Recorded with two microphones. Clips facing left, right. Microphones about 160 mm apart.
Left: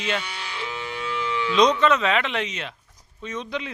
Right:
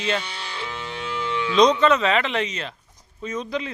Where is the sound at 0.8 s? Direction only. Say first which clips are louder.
Left 1 dB; 25° right (ahead or behind).